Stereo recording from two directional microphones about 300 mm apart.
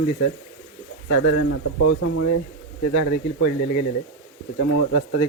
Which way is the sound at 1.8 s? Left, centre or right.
Left.